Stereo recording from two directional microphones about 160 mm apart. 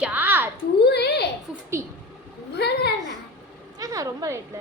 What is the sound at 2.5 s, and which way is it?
Speech, 90° left.